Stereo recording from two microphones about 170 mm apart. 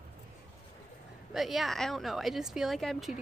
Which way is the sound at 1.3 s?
Centre (ahead or behind).